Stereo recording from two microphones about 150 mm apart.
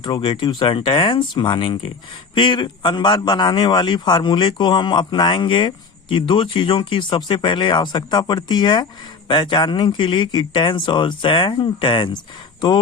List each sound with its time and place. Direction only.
0.0 s a man's voice: 30° left (ahead or behind)